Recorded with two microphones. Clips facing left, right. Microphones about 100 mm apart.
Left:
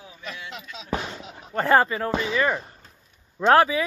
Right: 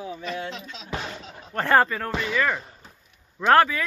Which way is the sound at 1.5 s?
5° left (ahead or behind).